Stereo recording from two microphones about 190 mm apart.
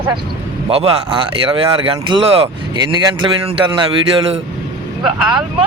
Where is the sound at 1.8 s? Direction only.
25° right (ahead or behind).